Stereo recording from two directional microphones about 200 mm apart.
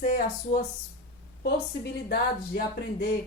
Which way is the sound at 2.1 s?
50° left (ahead or behind).